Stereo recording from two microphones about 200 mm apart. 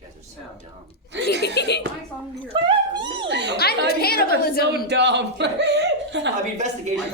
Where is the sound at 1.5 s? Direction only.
55° left (ahead or behind).